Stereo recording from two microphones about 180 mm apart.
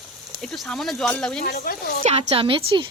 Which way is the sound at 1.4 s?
55° left (ahead or behind).